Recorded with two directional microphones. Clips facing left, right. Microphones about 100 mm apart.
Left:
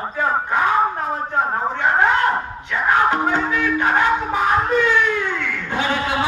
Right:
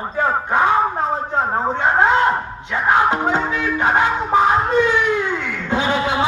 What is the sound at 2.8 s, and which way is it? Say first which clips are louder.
Music: right 1 dB; 20° right (ahead or behind).